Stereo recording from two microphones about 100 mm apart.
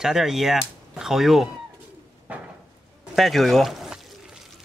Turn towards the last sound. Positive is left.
turn(degrees=-5)  # may be behind; listen again after turning